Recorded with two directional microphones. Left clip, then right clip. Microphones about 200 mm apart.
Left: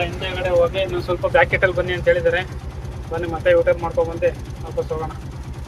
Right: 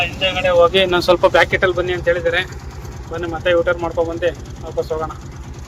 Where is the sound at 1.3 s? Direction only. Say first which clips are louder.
Right 2 dB; 15° right (ahead or behind).